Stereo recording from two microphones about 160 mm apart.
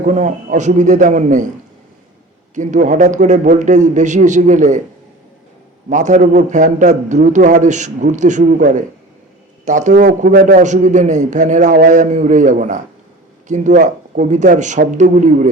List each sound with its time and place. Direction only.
0.0 s a man's voice: 50° right (ahead or behind)
2.6 s a man's voice: 50° right (ahead or behind)
5.9 s a man's voice: 50° right (ahead or behind)
10.1 s speech: 70° right (ahead or behind)
10.6 s a man's voice: 50° right (ahead or behind)